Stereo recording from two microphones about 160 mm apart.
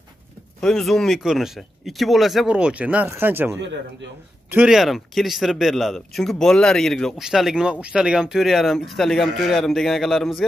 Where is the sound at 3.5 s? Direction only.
90° right.